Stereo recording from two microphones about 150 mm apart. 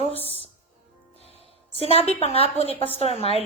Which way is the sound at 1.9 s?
40° left (ahead or behind).